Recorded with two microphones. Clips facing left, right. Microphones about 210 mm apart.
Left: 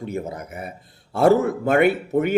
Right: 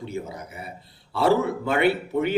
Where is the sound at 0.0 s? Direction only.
50° left (ahead or behind).